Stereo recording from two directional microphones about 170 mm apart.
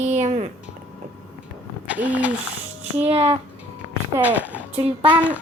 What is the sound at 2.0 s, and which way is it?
Ratchet, 10° right (ahead or behind).